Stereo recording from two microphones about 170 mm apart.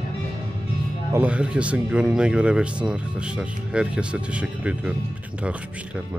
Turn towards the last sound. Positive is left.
turn(degrees=-5)  # may be behind; listen again after turning